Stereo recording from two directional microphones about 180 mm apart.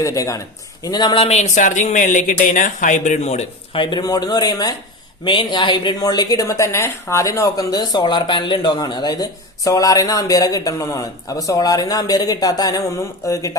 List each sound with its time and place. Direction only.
0.0 s a woman's voice: 20° left (ahead or behind)